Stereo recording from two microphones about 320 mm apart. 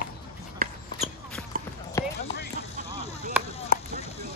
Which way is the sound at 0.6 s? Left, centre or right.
Right.